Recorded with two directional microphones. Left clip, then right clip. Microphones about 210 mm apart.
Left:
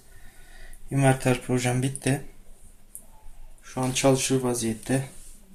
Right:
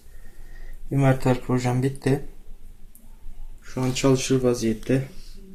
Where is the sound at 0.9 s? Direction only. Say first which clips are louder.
Right 1 dB; 5° left (ahead or behind).